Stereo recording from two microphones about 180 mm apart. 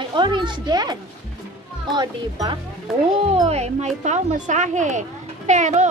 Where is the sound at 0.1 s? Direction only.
25° right (ahead or behind).